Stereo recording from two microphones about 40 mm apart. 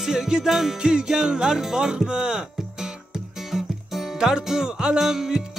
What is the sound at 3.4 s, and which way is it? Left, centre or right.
Music, centre.